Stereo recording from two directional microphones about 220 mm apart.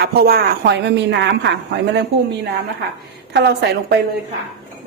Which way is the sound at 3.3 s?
50° right (ahead or behind).